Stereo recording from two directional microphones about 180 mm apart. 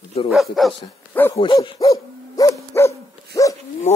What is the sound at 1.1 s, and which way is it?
Speech, 10° left (ahead or behind).